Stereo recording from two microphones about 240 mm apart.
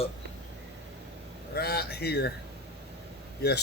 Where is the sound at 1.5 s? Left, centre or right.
Left.